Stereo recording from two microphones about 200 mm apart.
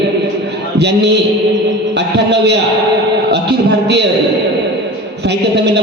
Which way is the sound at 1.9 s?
60° right (ahead or behind).